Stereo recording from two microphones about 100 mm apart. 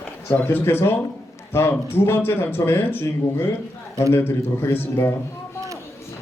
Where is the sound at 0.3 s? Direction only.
20° left (ahead or behind).